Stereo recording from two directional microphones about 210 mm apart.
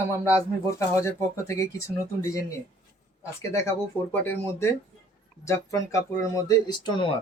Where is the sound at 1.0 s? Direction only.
15° left (ahead or behind).